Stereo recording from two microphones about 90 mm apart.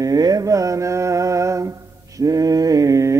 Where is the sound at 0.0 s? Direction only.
45° right (ahead or behind).